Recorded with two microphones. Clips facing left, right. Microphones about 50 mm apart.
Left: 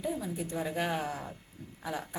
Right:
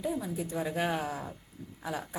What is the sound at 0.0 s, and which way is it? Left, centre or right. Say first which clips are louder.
Speech: right 1 dB; centre.